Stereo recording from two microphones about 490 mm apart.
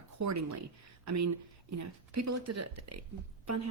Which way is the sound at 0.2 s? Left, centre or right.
Right.